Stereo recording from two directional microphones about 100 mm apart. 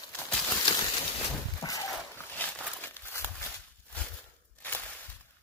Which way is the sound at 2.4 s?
15° left (ahead or behind).